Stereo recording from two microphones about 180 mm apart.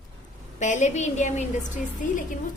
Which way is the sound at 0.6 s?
40° left (ahead or behind).